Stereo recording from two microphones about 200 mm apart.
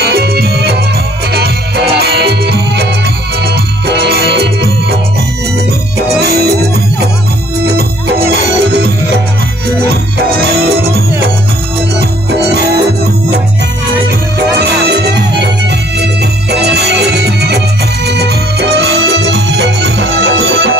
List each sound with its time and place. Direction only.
0.0 s music: 55° right (ahead or behind)
2.0 s music: 55° right (ahead or behind)
6.2 s music: 55° right (ahead or behind)
8.3 s music: 55° right (ahead or behind)
12.0 s organ: 55° right (ahead or behind)
14.6 s music: 55° right (ahead or behind)
16.4 s music: 55° right (ahead or behind)